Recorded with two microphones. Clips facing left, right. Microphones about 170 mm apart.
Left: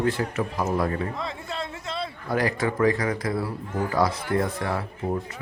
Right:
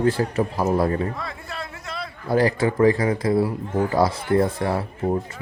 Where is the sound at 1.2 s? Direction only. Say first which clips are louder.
Left 1 dB; 25° left (ahead or behind).